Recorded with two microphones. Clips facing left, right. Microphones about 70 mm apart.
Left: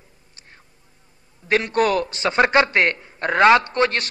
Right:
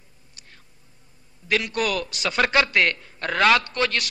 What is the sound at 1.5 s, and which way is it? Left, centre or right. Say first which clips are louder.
A man's voice: left 5 dB; left.